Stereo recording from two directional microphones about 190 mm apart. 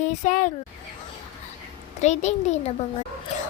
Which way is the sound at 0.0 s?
40° left (ahead or behind).